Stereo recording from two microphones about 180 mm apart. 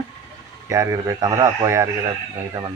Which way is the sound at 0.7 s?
20° right (ahead or behind).